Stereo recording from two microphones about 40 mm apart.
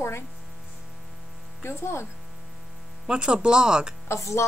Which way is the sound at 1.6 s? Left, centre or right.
Left.